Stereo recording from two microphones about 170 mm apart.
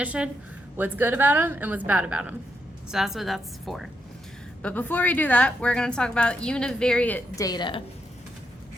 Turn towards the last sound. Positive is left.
turn(degrees=25)  # may be behind; listen again after turning